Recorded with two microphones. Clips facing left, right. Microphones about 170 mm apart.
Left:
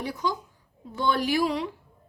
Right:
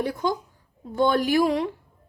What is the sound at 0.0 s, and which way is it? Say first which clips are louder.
Speech: right 4 dB; 55° right (ahead or behind).